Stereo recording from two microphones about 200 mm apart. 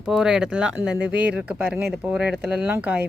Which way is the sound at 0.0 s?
5° right (ahead or behind).